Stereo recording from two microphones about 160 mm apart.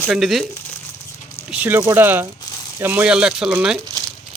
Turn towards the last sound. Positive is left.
turn(degrees=-5)  # may be behind; listen again after turning